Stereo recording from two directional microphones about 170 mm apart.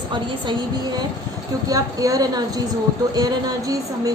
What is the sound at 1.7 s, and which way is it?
A woman's voice, 20° right (ahead or behind).